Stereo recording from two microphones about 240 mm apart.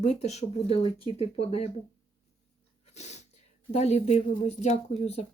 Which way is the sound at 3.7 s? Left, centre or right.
Left.